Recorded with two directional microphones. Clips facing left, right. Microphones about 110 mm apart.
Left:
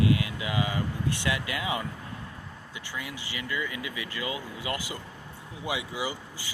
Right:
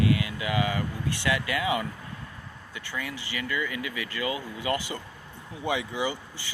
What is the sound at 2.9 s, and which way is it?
Speech, 15° left (ahead or behind).